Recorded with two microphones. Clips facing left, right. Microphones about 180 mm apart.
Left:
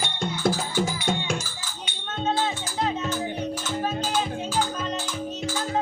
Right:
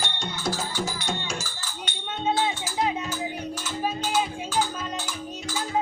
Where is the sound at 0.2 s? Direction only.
50° left (ahead or behind).